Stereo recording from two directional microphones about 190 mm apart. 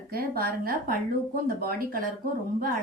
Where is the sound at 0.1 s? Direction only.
50° right (ahead or behind).